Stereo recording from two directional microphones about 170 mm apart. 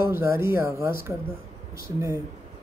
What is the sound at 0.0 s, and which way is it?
Speech, 15° right (ahead or behind).